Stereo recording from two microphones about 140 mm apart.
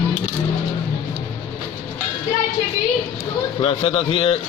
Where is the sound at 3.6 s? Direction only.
45° left (ahead or behind).